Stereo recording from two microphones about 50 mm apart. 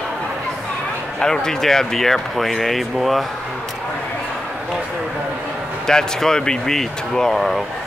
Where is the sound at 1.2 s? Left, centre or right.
Centre.